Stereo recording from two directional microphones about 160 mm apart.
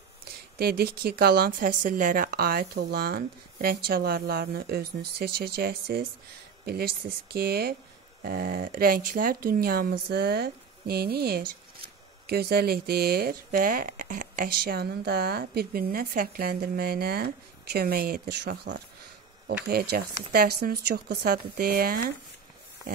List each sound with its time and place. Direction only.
0.6 s speech: 80° right